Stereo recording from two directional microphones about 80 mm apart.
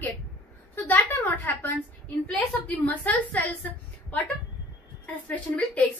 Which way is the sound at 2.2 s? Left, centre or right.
Centre.